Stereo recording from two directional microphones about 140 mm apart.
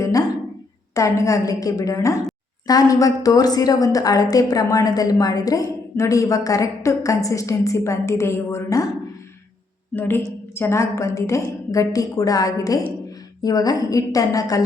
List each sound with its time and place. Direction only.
0.0 s a sound: 25° left (ahead or behind)
0.9 s a woman's voice: 20° left (ahead or behind)
9.9 s a woman's voice: 15° left (ahead or behind)